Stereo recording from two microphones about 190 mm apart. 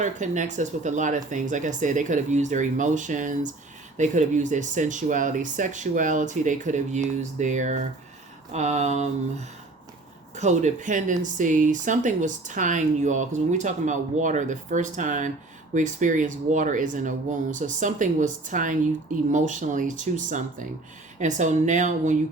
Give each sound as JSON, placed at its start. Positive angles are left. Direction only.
{"t": 0.0, "sound": "speech", "side_deg": -40}
{"t": 10.3, "sound": "speech", "side_deg": -40}